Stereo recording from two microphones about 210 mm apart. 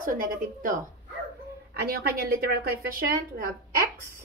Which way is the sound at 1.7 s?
45° right (ahead or behind).